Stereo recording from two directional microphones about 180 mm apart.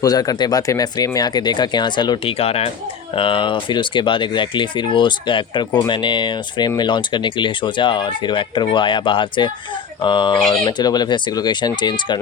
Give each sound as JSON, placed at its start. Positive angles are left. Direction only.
{"t": 0.0, "sound": "speech", "side_deg": 20}